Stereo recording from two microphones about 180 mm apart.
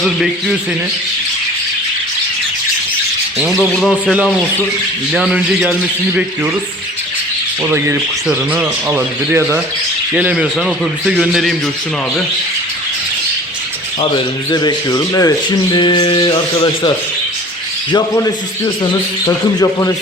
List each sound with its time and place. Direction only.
0.0 s a man's voice: centre (ahead or behind)
3.3 s speech: 15° right (ahead or behind)
3.6 s a man's voice: centre (ahead or behind)
7.6 s a man's voice: 15° right (ahead or behind)
14.0 s speech: 25° left (ahead or behind)
17.9 s speech: 20° left (ahead or behind)